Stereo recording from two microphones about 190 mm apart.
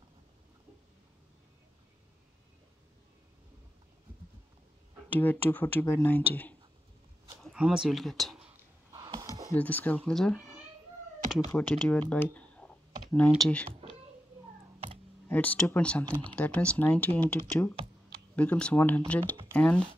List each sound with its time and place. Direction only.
5.2 s speech: 10° left (ahead or behind)
7.4 s speech: 5° right (ahead or behind)
8.5 s sniff: 20° right (ahead or behind)
9.5 s speech: 10° left (ahead or behind)
15.2 s speech: 10° left (ahead or behind)